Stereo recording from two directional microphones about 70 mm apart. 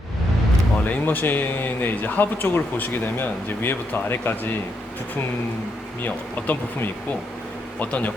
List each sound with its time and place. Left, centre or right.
0.9 s speech: left
6.0 s speech: left